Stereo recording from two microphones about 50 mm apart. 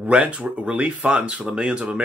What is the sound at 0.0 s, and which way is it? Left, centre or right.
Speech, right.